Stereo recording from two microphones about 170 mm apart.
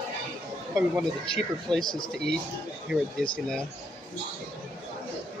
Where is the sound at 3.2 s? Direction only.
5° left (ahead or behind).